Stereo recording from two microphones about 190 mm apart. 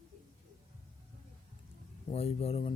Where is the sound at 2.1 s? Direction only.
30° left (ahead or behind).